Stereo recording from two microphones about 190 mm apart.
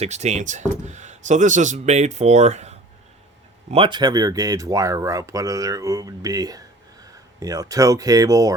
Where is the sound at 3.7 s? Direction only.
25° right (ahead or behind).